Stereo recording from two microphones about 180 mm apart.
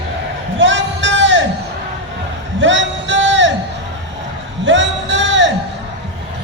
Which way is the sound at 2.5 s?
90° right.